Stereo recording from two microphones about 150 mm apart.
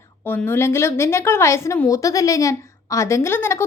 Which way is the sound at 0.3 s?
15° left (ahead or behind).